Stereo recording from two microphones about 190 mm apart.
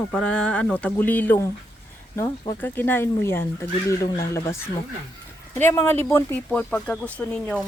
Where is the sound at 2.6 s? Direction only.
10° left (ahead or behind).